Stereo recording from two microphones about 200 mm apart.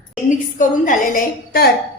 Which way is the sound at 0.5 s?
40° left (ahead or behind).